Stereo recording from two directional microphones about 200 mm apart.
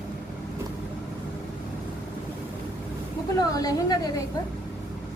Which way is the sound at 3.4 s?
20° left (ahead or behind).